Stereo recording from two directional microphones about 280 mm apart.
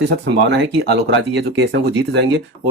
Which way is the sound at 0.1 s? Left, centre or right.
Right.